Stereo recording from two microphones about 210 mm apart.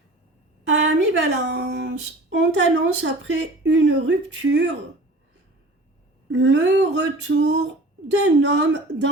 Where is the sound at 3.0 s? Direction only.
60° right (ahead or behind).